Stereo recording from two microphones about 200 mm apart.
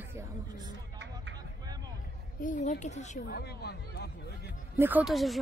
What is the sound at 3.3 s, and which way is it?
Speech, 55° left (ahead or behind).